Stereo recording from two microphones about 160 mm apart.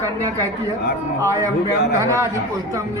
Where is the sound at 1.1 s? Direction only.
20° right (ahead or behind).